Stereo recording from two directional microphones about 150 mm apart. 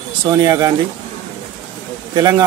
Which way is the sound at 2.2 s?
25° right (ahead or behind).